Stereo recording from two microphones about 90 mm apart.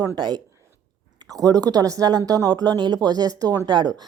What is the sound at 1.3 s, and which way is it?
A woman's voice, 45° right (ahead or behind).